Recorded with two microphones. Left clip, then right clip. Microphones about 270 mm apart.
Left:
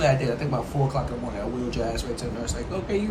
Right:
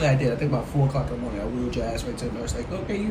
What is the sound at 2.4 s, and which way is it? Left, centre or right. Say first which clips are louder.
Speech: even; centre.